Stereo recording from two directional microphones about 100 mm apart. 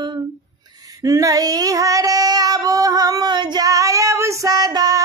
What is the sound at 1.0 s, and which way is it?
Child singing, 35° right (ahead or behind).